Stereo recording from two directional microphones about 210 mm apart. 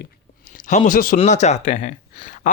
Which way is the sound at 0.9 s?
40° left (ahead or behind).